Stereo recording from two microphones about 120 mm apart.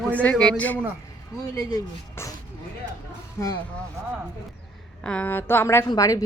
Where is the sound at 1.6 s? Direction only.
25° left (ahead or behind).